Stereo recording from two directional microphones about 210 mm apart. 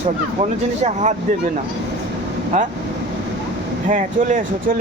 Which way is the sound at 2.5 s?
35° right (ahead or behind).